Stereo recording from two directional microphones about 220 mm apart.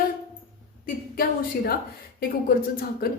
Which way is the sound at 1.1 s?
40° left (ahead or behind).